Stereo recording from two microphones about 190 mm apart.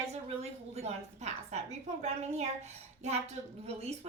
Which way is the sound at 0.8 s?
35° right (ahead or behind).